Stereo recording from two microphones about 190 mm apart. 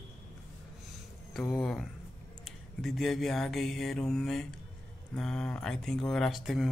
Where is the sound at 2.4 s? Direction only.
Centre (ahead or behind).